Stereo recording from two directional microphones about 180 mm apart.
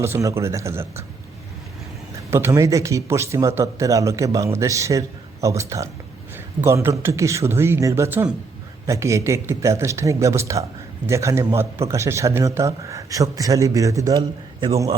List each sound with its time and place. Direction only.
0.0 s speech: 15° right (ahead or behind)
2.3 s speech: 15° right (ahead or behind)
6.3 s a sound: 15° right (ahead or behind)
7.0 s speech: 15° right (ahead or behind)